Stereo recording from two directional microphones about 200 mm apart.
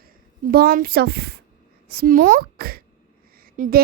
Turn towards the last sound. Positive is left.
turn(degrees=-45)  # may be behind; listen again after turning